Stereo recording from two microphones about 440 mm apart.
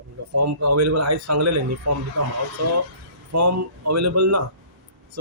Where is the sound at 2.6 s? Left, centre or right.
Right.